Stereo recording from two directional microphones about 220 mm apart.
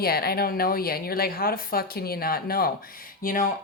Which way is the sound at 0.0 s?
45° left (ahead or behind).